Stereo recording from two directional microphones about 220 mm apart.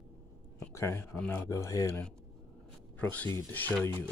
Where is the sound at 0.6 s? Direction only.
10° left (ahead or behind).